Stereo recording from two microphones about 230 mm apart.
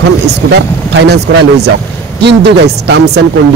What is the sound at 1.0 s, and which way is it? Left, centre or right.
A man's voice, right.